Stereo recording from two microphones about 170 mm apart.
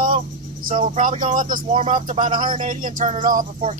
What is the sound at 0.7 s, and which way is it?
Speech, 50° right (ahead or behind).